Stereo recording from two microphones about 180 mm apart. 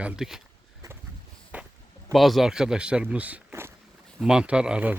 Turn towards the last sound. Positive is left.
turn(degrees=-5)  # may be behind; listen again after turning